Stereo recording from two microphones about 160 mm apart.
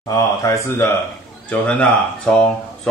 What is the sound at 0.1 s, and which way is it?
Speech, 20° left (ahead or behind).